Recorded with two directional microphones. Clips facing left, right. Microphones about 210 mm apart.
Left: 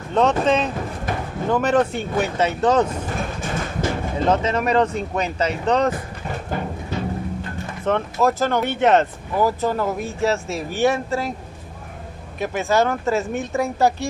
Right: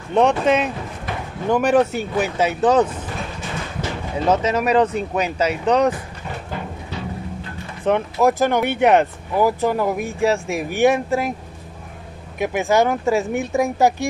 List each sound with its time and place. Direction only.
0.1 s speech: 10° right (ahead or behind)
4.3 s speech: 5° right (ahead or behind)
7.8 s speech: 15° right (ahead or behind)
12.4 s speech: 15° right (ahead or behind)